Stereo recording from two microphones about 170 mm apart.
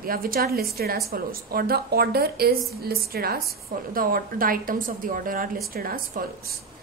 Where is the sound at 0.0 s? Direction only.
60° right (ahead or behind).